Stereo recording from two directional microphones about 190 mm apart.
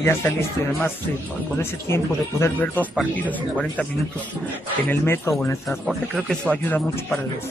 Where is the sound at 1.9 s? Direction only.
10° left (ahead or behind).